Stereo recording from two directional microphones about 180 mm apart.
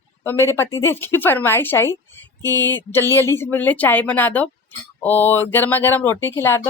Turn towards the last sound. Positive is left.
turn(degrees=15)  # may be behind; listen again after turning